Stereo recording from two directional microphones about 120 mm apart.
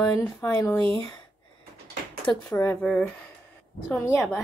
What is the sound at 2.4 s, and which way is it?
Speech, 15° left (ahead or behind).